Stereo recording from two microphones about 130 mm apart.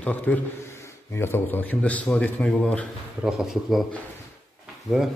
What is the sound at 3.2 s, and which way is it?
Speech, 5° right (ahead or behind).